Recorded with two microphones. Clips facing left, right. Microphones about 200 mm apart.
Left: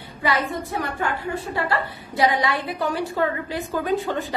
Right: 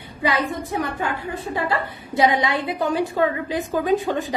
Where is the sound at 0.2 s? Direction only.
20° right (ahead or behind).